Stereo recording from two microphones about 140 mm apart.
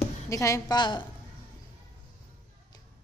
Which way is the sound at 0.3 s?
20° left (ahead or behind).